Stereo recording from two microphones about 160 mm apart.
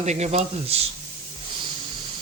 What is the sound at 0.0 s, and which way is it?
Speech, 45° right (ahead or behind).